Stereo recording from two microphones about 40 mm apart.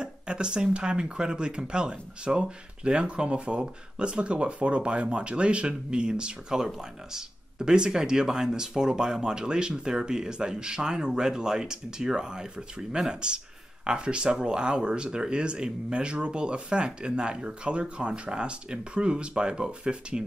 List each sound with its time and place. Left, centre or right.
0.0 s speech: right